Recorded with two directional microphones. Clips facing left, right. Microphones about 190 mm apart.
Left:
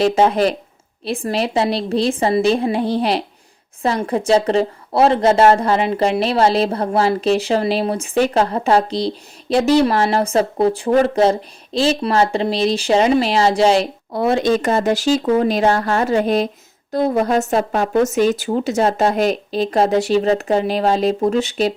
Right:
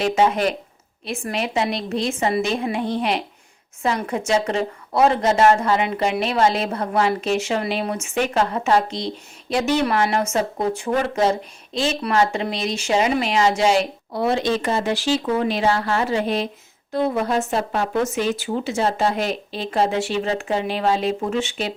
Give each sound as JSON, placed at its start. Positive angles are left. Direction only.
{"t": 0.0, "sound": "speech", "side_deg": 35}
{"t": 14.1, "sound": "speech", "side_deg": 50}